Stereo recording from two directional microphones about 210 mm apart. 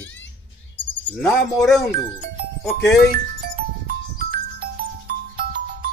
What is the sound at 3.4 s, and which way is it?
Music, 45° right (ahead or behind).